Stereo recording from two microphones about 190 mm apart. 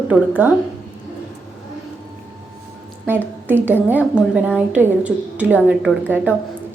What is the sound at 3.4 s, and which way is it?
A woman's voice, 10° right (ahead or behind).